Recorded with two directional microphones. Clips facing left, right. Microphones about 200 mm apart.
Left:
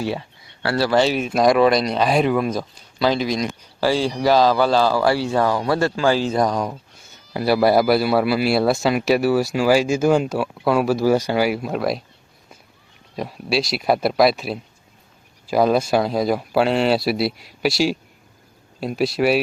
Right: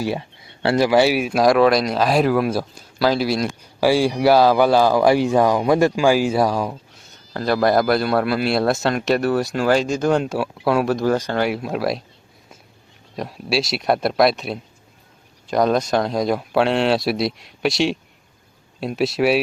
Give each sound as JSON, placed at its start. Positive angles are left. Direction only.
{"t": 0.6, "sound": "speech", "side_deg": -20}
{"t": 0.9, "sound": "a man's voice", "side_deg": -10}
{"t": 7.3, "sound": "a man's voice", "side_deg": 10}
{"t": 13.1, "sound": "a man's voice", "side_deg": 0}